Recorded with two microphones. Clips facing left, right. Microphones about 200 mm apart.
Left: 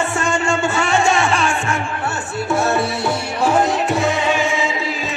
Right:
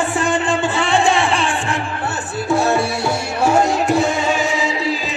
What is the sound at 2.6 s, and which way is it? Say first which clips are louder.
Music: right 1 dB; 15° right (ahead or behind).